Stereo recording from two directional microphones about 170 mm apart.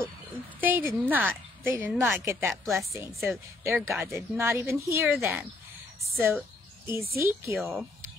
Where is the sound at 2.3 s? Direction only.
15° right (ahead or behind).